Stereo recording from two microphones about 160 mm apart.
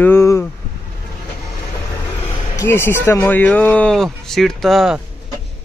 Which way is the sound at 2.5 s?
15° left (ahead or behind).